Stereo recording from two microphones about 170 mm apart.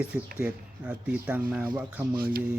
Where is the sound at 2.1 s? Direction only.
60° right (ahead or behind).